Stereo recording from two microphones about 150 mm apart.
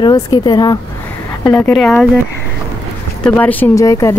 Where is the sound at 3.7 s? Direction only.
20° left (ahead or behind).